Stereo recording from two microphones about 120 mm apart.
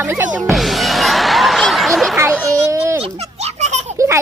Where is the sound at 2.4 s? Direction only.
25° right (ahead or behind).